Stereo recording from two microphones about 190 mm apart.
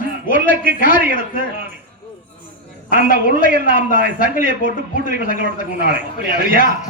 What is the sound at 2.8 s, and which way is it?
Speech, 45° left (ahead or behind).